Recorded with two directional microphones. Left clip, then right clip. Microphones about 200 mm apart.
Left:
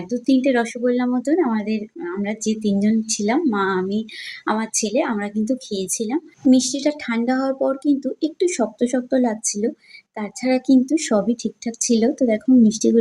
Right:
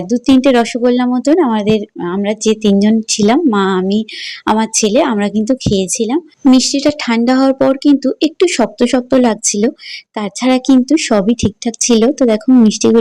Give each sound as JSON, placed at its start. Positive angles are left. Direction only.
{"t": 0.1, "sound": "speech", "side_deg": -40}